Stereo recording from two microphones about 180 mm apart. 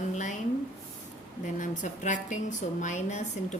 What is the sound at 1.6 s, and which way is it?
A woman's voice, 45° left (ahead or behind).